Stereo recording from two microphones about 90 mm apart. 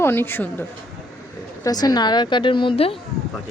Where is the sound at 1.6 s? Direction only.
45° left (ahead or behind); by 2.9 s 85° left.